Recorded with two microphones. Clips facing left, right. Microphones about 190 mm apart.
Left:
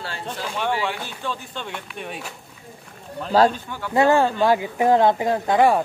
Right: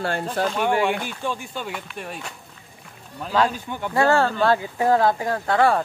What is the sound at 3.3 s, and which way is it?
Speech, 35° left (ahead or behind).